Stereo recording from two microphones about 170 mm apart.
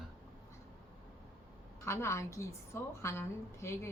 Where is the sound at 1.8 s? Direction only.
15° left (ahead or behind).